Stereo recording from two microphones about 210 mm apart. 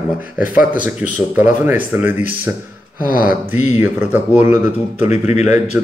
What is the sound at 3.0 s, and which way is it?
Speech, 40° left (ahead or behind).